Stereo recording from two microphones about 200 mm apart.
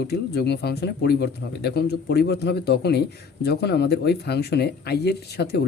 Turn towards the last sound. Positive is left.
turn(degrees=55)  # may be behind; listen again after turning